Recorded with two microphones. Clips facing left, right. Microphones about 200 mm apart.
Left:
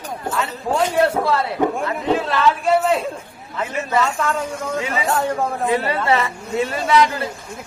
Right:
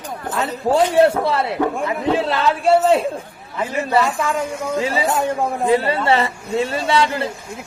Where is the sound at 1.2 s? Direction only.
25° right (ahead or behind).